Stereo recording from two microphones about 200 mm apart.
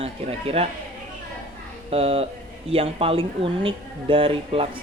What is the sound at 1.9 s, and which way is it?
Speech, 30° right (ahead or behind).